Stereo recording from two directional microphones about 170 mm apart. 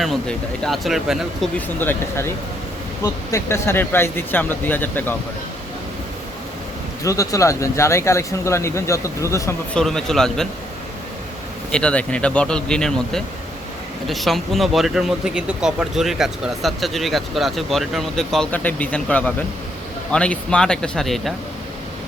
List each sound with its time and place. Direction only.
0.0 s speech: centre (ahead or behind)
1.5 s speech: 10° left (ahead or behind)
7.0 s speech: 20° left (ahead or behind)
9.7 s speech: 5° left (ahead or behind)
11.7 s speech: 5° left (ahead or behind)